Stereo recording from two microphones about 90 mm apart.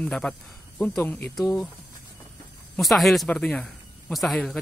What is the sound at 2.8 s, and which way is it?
Speech, centre (ahead or behind).